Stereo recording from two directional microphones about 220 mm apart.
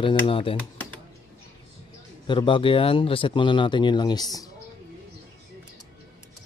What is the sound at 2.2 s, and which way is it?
Speech, 20° left (ahead or behind).